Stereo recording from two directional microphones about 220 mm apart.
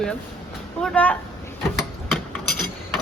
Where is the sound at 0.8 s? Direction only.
5° left (ahead or behind).